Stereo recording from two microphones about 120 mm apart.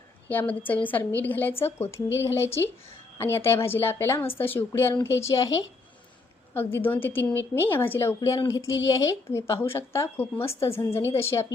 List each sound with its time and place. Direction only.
0.3 s a woman's voice: 15° left (ahead or behind)
6.5 s a woman's voice: 15° left (ahead or behind)